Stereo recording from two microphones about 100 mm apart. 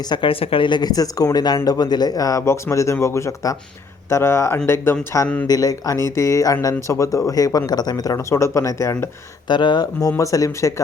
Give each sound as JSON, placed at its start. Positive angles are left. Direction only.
{"t": 0.1, "sound": "speech", "side_deg": 60}
{"t": 5.5, "sound": "speech", "side_deg": 35}
{"t": 9.5, "sound": "speech", "side_deg": 50}